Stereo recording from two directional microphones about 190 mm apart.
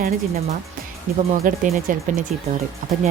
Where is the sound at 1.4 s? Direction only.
45° right (ahead or behind).